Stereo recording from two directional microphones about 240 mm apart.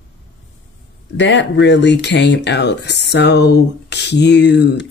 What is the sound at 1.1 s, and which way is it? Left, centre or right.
Speech, left.